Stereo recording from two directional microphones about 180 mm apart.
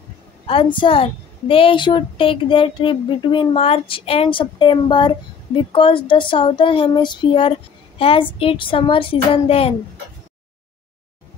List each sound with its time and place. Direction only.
0.5 s a woman's voice: 30° left (ahead or behind)